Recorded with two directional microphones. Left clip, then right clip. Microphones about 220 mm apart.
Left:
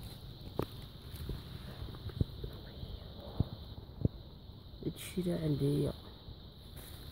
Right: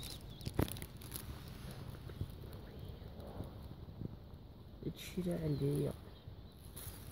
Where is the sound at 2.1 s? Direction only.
35° left (ahead or behind).